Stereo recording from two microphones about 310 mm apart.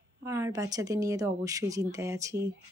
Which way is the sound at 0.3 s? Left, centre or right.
Centre.